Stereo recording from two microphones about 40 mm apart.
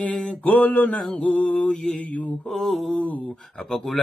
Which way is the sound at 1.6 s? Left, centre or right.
Centre.